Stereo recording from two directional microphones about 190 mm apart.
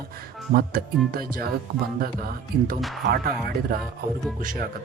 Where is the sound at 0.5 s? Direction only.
50° right (ahead or behind).